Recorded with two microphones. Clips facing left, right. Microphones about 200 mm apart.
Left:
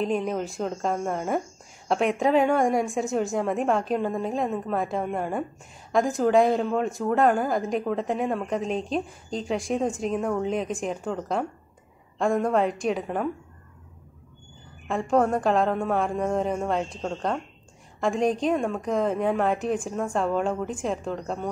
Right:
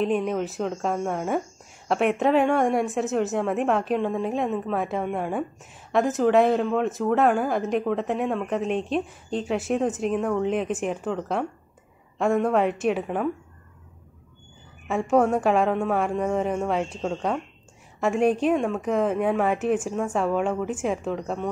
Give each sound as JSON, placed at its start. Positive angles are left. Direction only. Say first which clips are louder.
{"t": 0.0, "sound": "speech", "louder": "right 2 dB", "side_deg": 0}
{"t": 14.9, "sound": "a woman's voice", "louder": "right 2 dB", "side_deg": -5}